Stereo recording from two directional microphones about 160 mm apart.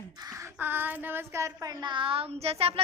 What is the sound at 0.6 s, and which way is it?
Child singing, 10° right (ahead or behind).